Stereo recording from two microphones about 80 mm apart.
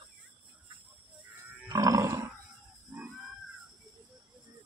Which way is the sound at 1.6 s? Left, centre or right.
Right.